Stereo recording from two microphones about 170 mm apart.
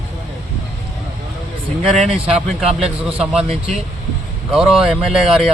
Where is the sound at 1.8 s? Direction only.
35° right (ahead or behind).